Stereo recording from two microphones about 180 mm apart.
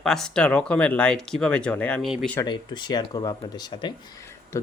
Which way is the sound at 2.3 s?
25° left (ahead or behind).